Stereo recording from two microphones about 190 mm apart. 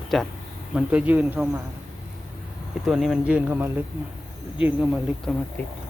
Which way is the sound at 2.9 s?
Centre (ahead or behind).